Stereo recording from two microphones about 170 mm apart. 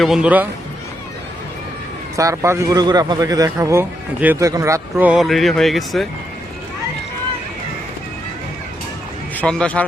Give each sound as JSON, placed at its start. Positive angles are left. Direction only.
{"t": 0.0, "sound": "a man's voice", "side_deg": -5}
{"t": 2.1, "sound": "a man's voice", "side_deg": -15}
{"t": 9.3, "sound": "speech", "side_deg": 5}